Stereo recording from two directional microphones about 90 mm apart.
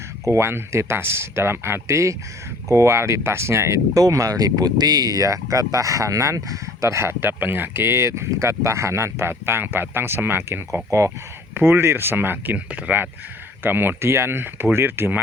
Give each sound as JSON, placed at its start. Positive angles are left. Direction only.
{"t": 0.3, "sound": "speech", "side_deg": -30}